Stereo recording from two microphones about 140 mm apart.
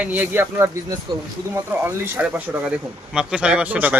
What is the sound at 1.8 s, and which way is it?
Speech, 15° right (ahead or behind).